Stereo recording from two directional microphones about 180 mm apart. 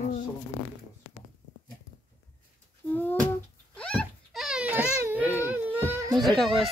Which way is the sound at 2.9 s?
10° left (ahead or behind).